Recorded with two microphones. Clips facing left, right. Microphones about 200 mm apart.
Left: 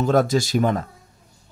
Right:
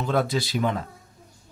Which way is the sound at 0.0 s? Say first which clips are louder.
Left 6 dB; 45° left (ahead or behind).